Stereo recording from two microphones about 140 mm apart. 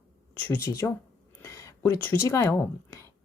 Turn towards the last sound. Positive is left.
turn(degrees=20)  # may be behind; listen again after turning